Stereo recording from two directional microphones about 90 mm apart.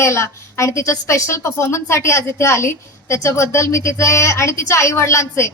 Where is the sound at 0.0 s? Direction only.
30° left (ahead or behind).